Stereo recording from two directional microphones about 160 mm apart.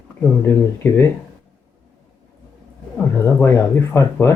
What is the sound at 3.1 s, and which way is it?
Speech, 15° left (ahead or behind).